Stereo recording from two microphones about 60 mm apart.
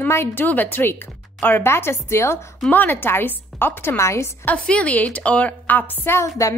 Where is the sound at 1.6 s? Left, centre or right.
Left.